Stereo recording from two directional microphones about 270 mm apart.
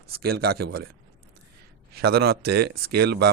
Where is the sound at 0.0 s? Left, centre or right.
Right.